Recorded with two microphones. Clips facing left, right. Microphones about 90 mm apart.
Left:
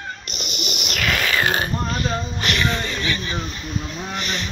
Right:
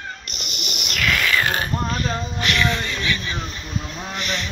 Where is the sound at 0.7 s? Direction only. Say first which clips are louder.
Right 1 dB; 20° left (ahead or behind).